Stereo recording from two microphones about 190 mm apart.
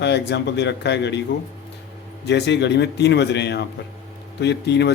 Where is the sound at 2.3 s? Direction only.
65° left (ahead or behind).